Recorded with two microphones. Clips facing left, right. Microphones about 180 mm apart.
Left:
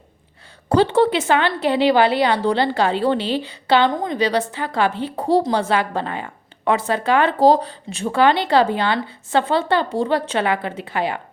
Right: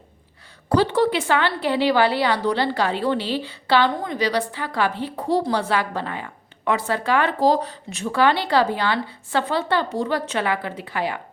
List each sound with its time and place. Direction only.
0.7 s a woman's voice: 25° left (ahead or behind)